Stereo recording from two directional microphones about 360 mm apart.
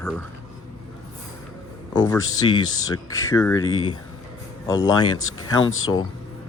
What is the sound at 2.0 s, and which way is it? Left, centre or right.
Speech, centre.